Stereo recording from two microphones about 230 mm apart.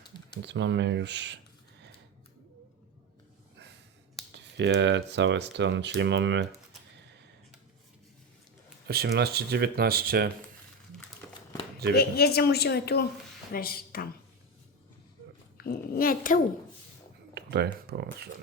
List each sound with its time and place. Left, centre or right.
0.4 s speech: right
4.4 s speech: right
8.9 s speech: right
11.2 s a sound: centre
11.9 s speech: left
15.5 s a woman's voice: left
17.3 s speech: right